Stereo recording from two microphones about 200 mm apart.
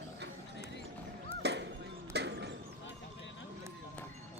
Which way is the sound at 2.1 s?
55° right (ahead or behind).